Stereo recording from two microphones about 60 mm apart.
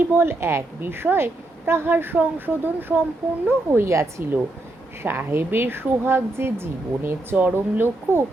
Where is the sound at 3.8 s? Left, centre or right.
Right.